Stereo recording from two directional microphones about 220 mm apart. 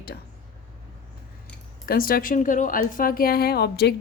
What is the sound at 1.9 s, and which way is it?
A woman's voice, 40° left (ahead or behind).